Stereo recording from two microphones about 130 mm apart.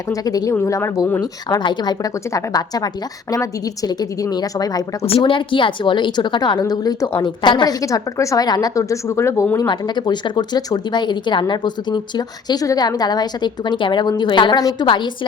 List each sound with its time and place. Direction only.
0.1 s a woman's voice: 25° left (ahead or behind)
5.0 s a woman's voice: 45° left (ahead or behind)